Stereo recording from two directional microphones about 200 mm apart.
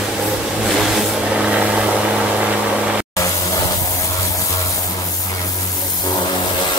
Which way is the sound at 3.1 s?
15° left (ahead or behind).